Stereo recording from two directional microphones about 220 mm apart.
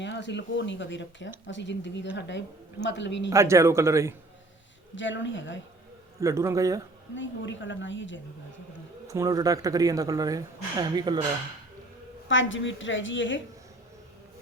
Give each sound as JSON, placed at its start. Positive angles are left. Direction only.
{"t": 0.0, "sound": "a woman's voice", "side_deg": 55}
{"t": 3.2, "sound": "speech", "side_deg": -15}
{"t": 4.9, "sound": "speech", "side_deg": 55}
{"t": 6.1, "sound": "speech", "side_deg": -15}
{"t": 7.2, "sound": "speech", "side_deg": 60}
{"t": 9.0, "sound": "speech", "side_deg": -15}
{"t": 12.3, "sound": "speech", "side_deg": 60}